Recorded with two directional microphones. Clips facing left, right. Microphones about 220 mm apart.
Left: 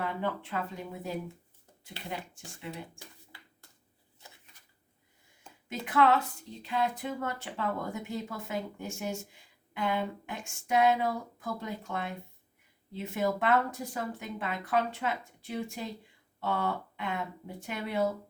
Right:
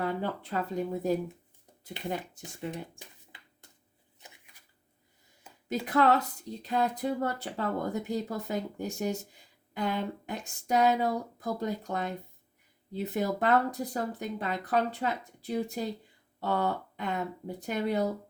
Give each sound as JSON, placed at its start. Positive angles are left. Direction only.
{"t": 0.0, "sound": "speech", "side_deg": -40}
{"t": 2.0, "sound": "speech", "side_deg": -15}
{"t": 2.6, "sound": "speech", "side_deg": -40}
{"t": 3.3, "sound": "a sound", "side_deg": -20}
{"t": 5.6, "sound": "speech", "side_deg": -40}